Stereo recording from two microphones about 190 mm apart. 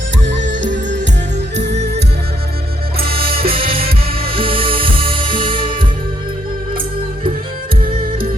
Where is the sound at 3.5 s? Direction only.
30° right (ahead or behind).